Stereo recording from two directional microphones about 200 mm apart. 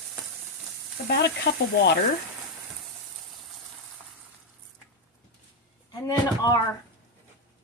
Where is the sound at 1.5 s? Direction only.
60° left (ahead or behind).